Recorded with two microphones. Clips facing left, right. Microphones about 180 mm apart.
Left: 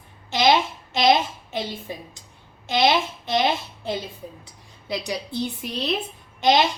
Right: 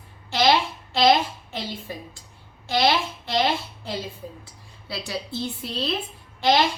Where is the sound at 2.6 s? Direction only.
20° left (ahead or behind).